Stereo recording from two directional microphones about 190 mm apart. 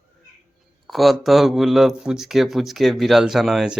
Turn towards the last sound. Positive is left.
turn(degrees=0)  # may be behind; listen again after turning